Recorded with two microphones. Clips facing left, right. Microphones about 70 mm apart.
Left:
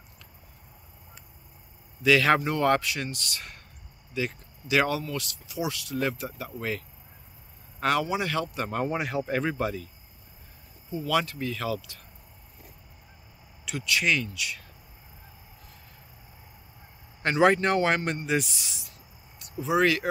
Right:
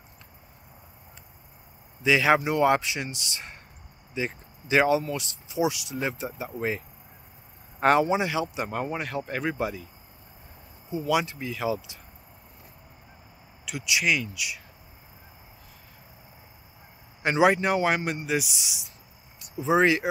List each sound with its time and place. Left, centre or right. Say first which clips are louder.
2.0 s speech: even; centre
7.8 s speech: right 5 dB; right
8.3 s speech: right 1 dB; centre
10.9 s speech: right 1 dB; centre
13.8 s speech: even; centre
17.2 s speech: even; centre
18.5 s speech: right 2 dB; centre